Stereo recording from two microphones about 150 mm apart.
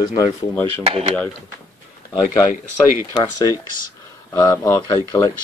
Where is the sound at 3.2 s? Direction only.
25° left (ahead or behind).